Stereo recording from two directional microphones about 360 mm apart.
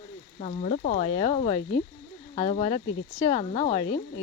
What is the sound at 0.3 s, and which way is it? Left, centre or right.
Speech, centre.